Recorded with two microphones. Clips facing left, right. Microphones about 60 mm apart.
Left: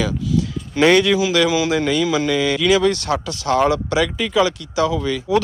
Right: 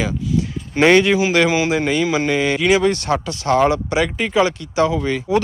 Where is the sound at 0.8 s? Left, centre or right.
Right.